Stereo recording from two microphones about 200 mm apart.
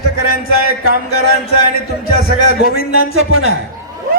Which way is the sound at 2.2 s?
50° left (ahead or behind).